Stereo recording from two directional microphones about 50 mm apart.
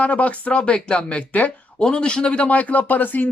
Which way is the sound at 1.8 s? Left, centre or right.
Centre.